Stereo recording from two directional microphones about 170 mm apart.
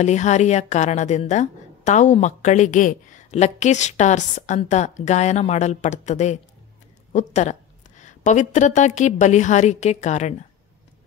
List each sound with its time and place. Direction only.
0.0 s a woman's voice: 45° left (ahead or behind)